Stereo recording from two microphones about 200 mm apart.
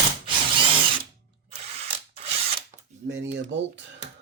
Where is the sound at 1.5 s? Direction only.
30° right (ahead or behind).